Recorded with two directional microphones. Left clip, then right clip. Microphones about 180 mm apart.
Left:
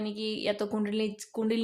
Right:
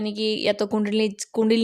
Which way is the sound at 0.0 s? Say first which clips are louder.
Right 9 dB; 45° right (ahead or behind).